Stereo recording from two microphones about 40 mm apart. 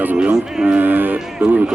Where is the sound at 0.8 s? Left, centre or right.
Right.